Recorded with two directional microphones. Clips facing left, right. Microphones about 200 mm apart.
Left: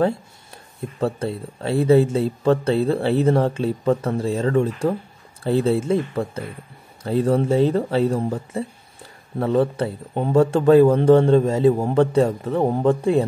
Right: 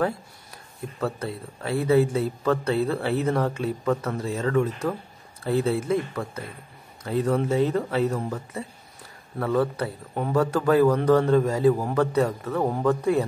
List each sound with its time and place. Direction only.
0.9 s a man's voice: 30° left (ahead or behind)